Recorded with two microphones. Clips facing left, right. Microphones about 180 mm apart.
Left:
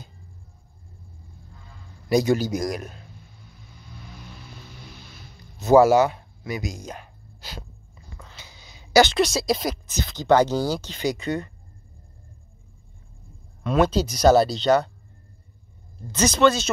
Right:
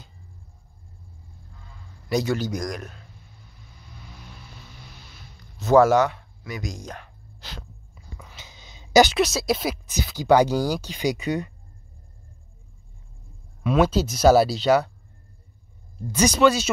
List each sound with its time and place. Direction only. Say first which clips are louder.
2.0 s speech: left 4 dB; 10° left (ahead or behind)
5.6 s speech: left 1 dB; 10° left (ahead or behind)
6.1 s a sound: left 4 dB; 10° left (ahead or behind)
8.2 s a sound: even; 15° right (ahead or behind)
9.1 s speech: left 1 dB; 5° right (ahead or behind)
13.7 s speech: even; 5° right (ahead or behind)
16.1 s speech: right 1 dB; 10° right (ahead or behind)